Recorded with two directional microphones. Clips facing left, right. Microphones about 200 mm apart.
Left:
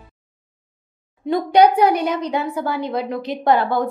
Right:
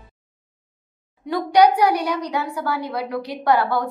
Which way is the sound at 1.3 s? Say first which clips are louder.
Left 2 dB; 25° left (ahead or behind).